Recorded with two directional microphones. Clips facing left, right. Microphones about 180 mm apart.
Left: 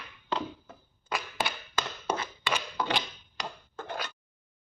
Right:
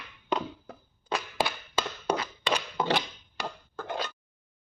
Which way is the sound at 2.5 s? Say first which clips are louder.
Right 4 dB; 25° right (ahead or behind).